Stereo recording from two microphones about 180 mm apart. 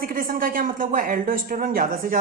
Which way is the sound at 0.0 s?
50° right (ahead or behind).